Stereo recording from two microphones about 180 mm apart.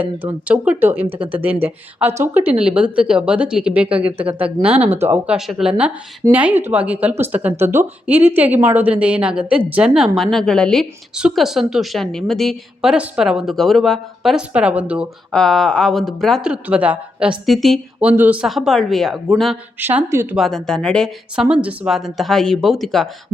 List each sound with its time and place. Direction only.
0.0 s speech: 10° right (ahead or behind)
1.0 s speech: 30° right (ahead or behind)
1.6 s a woman's voice: 10° right (ahead or behind)
15.3 s a woman's voice: 5° left (ahead or behind); by 20.2 s 10° right (ahead or behind)
20.3 s a woman's voice: centre (ahead or behind)